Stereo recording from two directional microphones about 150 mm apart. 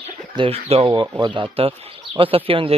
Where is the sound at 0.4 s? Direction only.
40° right (ahead or behind).